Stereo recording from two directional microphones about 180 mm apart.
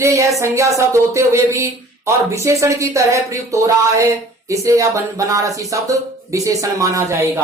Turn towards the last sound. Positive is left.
turn(degrees=-15)  # may be behind; listen again after turning